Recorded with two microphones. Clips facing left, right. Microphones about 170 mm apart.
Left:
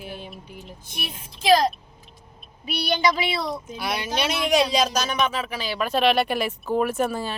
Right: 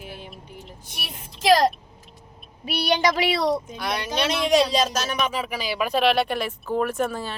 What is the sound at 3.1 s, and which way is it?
Speech, 80° right.